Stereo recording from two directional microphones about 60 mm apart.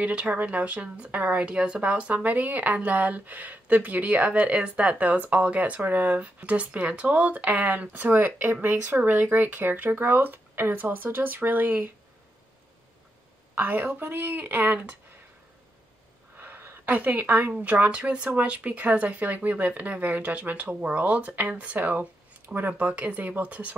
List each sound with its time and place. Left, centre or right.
0.0 s speech: right
1.4 s speech: centre; by 11.9 s right
13.6 s speech: right
16.3 s speech: right